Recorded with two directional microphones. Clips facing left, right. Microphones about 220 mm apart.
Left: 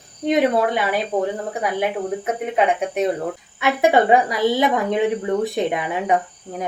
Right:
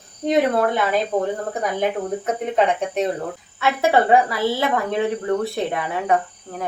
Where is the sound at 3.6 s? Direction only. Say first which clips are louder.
Left 2 dB; 15° left (ahead or behind).